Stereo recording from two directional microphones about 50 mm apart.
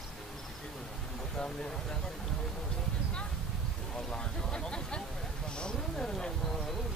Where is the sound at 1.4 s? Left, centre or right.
Centre.